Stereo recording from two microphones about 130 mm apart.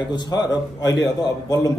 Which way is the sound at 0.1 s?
35° left (ahead or behind).